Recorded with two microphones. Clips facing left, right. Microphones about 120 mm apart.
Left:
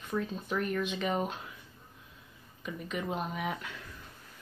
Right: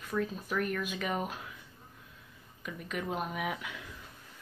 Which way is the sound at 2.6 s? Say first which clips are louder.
Left 1 dB; centre (ahead or behind).